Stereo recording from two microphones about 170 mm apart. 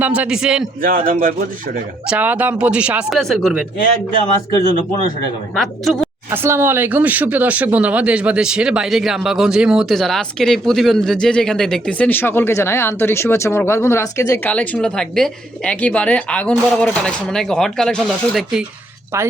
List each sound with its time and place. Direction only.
0.0 s speech: 5° right (ahead or behind)
0.8 s speech: 55° right (ahead or behind)
2.0 s speech: 10° right (ahead or behind)
5.5 s speech: centre (ahead or behind)
6.3 s speech: 15° right (ahead or behind)